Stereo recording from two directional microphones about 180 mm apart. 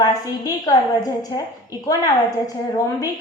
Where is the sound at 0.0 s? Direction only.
20° left (ahead or behind).